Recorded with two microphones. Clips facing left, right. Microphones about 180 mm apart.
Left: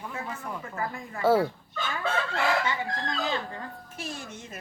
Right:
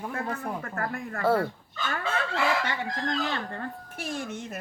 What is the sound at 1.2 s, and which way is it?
Speech, centre (ahead or behind).